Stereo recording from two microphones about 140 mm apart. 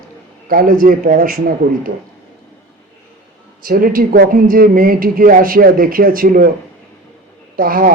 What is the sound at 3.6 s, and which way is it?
Speech, 90° right.